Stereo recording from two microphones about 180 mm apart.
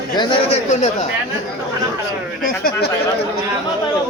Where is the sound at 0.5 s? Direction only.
40° left (ahead or behind).